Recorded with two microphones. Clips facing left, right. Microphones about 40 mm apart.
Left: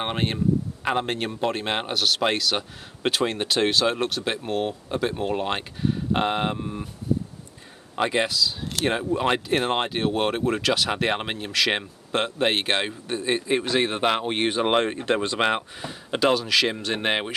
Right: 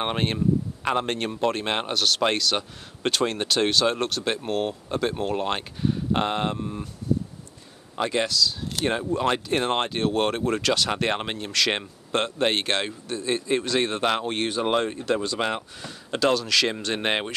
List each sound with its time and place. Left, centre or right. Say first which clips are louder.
0.0 s a man's voice: even; centre
7.9 s a man's voice: left 1 dB; left